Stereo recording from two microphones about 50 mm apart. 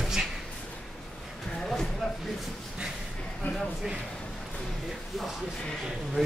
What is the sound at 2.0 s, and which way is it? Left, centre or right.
Speech, centre.